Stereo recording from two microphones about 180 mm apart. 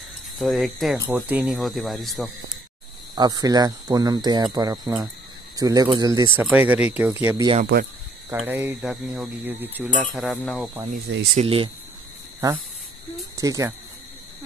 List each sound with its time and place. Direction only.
0.4 s speech: centre (ahead or behind)
0.9 s speech: 15° right (ahead or behind)
1.4 s speech: centre (ahead or behind)
3.2 s speech: 20° right (ahead or behind)
10.1 s speech: centre (ahead or behind)
11.3 s speech: 30° right (ahead or behind)
12.4 s speech: 20° right (ahead or behind)